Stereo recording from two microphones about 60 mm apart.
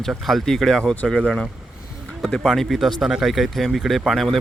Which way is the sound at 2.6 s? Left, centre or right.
Centre.